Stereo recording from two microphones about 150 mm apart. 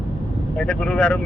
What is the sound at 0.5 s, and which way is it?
Speech, 5° left (ahead or behind).